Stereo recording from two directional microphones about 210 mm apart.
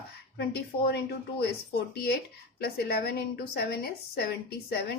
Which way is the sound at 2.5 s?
50° left (ahead or behind).